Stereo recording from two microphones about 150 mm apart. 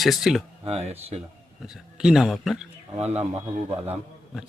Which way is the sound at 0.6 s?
45° right (ahead or behind).